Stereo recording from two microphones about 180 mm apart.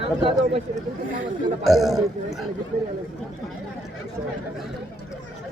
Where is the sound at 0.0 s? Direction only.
35° right (ahead or behind).